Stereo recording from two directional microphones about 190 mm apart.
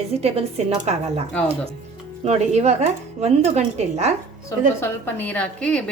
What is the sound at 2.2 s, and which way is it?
A woman's voice, 35° right (ahead or behind).